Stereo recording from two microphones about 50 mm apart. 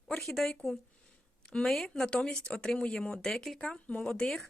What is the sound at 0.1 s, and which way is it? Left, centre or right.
A woman's voice, centre.